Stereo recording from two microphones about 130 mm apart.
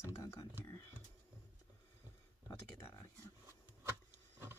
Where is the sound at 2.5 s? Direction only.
20° left (ahead or behind).